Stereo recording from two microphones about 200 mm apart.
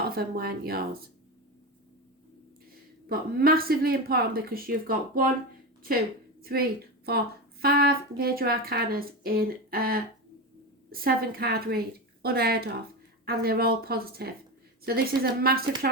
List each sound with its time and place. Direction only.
0.0 s a woman's voice: 50° right (ahead or behind)
3.1 s a woman's voice: 50° right (ahead or behind)
6.4 s a woman's voice: 50° right (ahead or behind)